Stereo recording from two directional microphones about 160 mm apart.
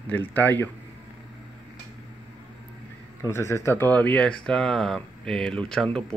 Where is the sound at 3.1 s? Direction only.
15° left (ahead or behind).